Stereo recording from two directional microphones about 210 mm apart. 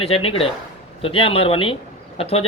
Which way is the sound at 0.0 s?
30° left (ahead or behind).